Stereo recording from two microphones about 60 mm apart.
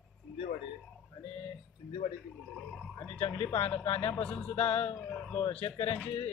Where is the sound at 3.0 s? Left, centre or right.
Left.